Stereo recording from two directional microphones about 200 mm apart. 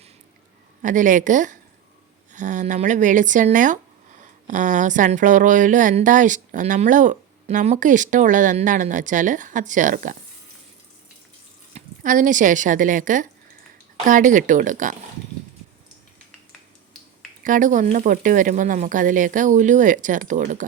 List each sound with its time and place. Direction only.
0.8 s speech: 40° right (ahead or behind)
11.7 s speech: 40° right (ahead or behind)
17.4 s speech: 40° right (ahead or behind)